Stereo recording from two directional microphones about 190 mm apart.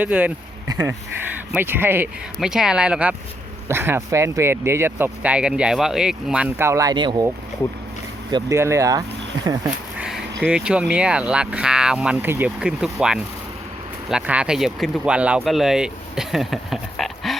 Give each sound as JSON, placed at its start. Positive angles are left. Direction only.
{"t": 0.0, "sound": "speech", "side_deg": -10}
{"t": 8.3, "sound": "speech", "side_deg": -20}
{"t": 10.0, "sound": "a sound", "side_deg": 0}
{"t": 10.4, "sound": "speech", "side_deg": -5}